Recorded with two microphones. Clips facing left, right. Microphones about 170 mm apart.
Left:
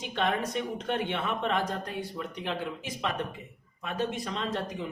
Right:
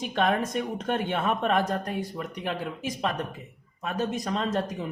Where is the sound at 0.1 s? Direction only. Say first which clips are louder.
Right 3 dB; 45° right (ahead or behind).